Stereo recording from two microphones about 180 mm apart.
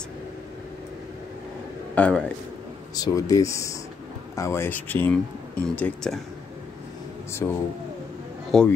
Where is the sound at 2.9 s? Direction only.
20° left (ahead or behind); by 6.2 s 5° left (ahead or behind).